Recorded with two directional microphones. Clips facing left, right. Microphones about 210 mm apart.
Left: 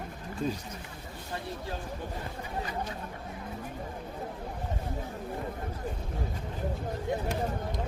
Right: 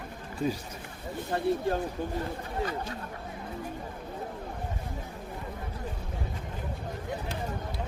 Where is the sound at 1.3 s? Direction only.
55° right (ahead or behind).